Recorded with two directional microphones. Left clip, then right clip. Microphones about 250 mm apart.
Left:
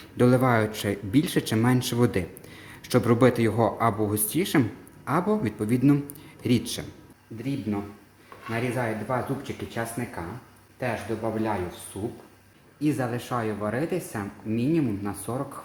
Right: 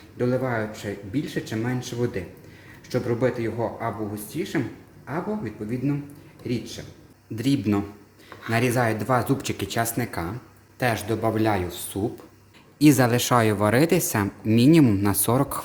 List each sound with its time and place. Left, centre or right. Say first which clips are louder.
0.2 s speech: left 4 dB; left
7.3 s speech: right 7 dB; right